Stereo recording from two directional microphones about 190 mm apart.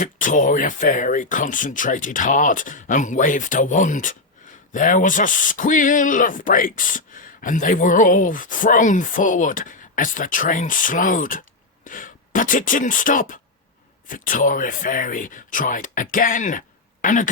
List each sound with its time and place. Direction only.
0.0 s speech: 40° left (ahead or behind)